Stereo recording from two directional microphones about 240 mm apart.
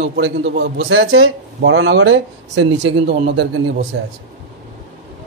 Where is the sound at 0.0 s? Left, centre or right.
Right.